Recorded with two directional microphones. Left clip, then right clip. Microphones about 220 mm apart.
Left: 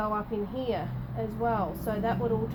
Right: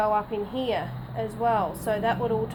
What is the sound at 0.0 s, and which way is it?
Speech, 30° right (ahead or behind).